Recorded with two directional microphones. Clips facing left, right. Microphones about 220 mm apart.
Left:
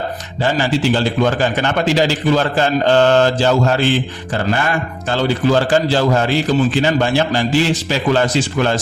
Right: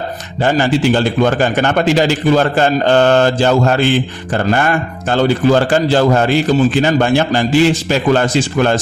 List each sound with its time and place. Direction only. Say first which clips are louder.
0.4 s a man's voice: right 3 dB; 50° right (ahead or behind)